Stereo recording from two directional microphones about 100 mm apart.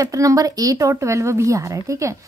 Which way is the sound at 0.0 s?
35° right (ahead or behind).